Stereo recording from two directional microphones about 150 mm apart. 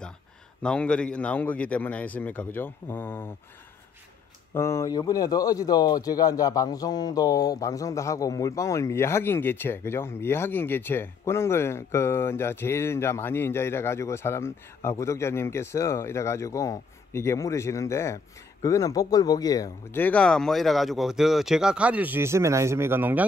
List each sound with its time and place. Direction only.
0.6 s a man's voice: 5° left (ahead or behind)
4.6 s a man's voice: 20° left (ahead or behind)
20.0 s speech: 10° left (ahead or behind); by 23.2 s 15° right (ahead or behind)